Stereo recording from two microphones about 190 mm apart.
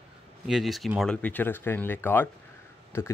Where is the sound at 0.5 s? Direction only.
Centre (ahead or behind).